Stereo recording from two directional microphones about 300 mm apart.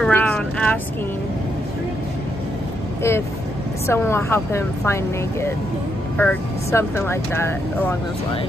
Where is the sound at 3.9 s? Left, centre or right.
Centre.